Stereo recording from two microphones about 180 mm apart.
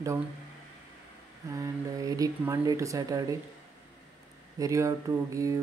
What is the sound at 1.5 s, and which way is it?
Speech, 20° right (ahead or behind).